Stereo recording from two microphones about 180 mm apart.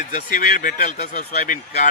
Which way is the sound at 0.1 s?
45° left (ahead or behind).